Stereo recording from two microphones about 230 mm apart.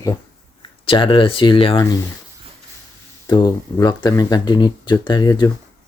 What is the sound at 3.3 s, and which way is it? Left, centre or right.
Speech, centre.